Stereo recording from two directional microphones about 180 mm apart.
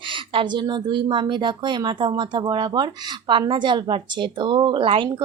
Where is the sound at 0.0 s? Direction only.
30° right (ahead or behind).